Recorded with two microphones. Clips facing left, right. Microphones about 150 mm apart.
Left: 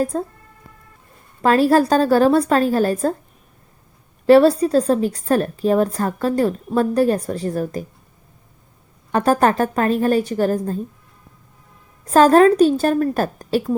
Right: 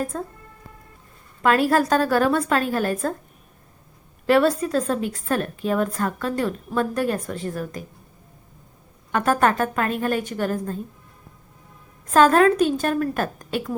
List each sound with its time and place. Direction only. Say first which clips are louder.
0.0 s a woman's voice: left 6 dB; 35° left (ahead or behind)
1.4 s a woman's voice: left 4 dB; 30° left (ahead or behind)
4.3 s a woman's voice: left 7 dB; 35° left (ahead or behind)
9.1 s a woman's voice: left 4 dB; 35° left (ahead or behind)
12.0 s a woman's voice: left 4 dB; 35° left (ahead or behind)